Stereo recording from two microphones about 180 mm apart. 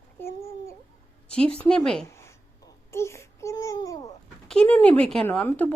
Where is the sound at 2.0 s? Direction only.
15° left (ahead or behind).